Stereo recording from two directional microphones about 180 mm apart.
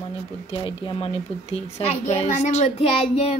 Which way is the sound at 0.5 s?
25° left (ahead or behind).